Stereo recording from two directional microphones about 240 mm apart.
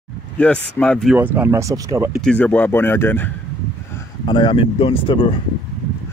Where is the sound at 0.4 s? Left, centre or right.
Centre.